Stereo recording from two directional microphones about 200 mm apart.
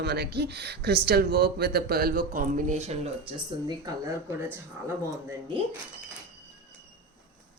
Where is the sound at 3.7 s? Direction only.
20° right (ahead or behind).